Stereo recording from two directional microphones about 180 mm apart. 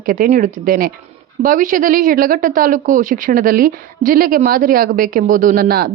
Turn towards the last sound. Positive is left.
turn(degrees=-55)  # may be behind; listen again after turning